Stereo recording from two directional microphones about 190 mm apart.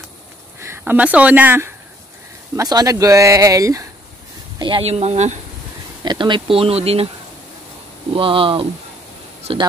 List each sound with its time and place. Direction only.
0.6 s speech: 10° right (ahead or behind); by 5.4 s 35° right (ahead or behind)
6.0 s speech: 25° right (ahead or behind)
8.1 s speech: 30° right (ahead or behind)